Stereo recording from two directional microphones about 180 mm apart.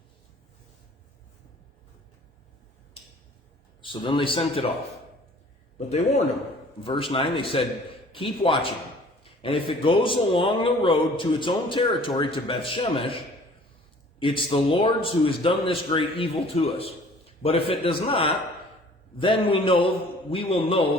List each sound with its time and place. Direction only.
3.8 s a man's voice: 25° left (ahead or behind)
5.9 s a man's voice: 35° left (ahead or behind)
14.2 s a man's voice: 30° left (ahead or behind)